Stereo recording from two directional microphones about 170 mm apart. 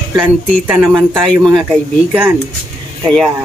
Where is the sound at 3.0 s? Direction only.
5° left (ahead or behind).